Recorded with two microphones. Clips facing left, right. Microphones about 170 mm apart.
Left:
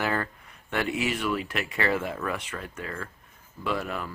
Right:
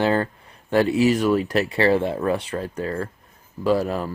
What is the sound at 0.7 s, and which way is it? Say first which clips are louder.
Speech: right 10 dB; 35° right (ahead or behind).